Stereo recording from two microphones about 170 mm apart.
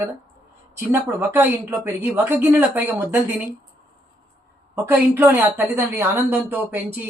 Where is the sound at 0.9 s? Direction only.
15° right (ahead or behind).